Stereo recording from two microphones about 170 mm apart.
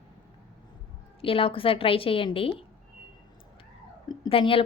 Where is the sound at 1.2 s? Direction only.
35° left (ahead or behind).